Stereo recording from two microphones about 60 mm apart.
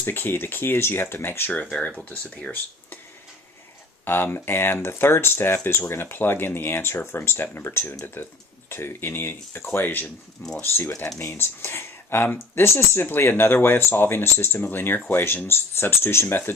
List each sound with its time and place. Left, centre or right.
0.1 s speech: left
2.0 s speech: centre
4.0 s speech: left